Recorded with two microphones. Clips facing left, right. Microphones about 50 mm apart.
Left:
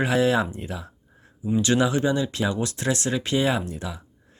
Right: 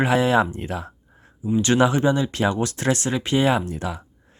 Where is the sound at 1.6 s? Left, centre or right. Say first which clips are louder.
Right 4 dB; right.